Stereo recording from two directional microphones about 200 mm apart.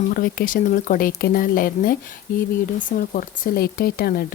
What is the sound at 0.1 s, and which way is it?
Speech, 45° left (ahead or behind).